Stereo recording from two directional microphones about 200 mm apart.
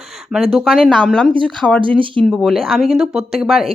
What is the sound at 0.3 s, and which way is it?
Speech, 5° right (ahead or behind).